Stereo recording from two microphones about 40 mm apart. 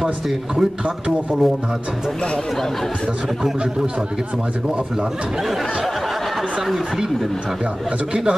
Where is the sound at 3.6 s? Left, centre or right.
Right.